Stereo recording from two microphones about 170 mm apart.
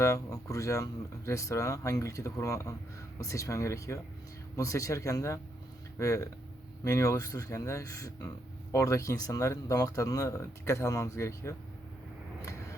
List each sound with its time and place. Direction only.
0.0 s speech: 20° left (ahead or behind)